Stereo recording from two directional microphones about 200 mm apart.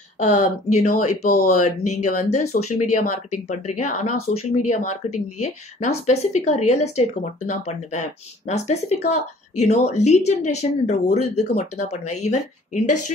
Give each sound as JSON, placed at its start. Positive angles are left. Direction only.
{"t": 0.2, "sound": "speech", "side_deg": 40}